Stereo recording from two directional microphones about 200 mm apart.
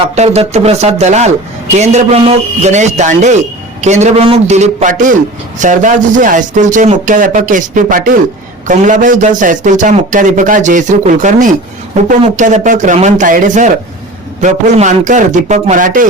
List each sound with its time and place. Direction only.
0.0 s a man's voice: 30° right (ahead or behind)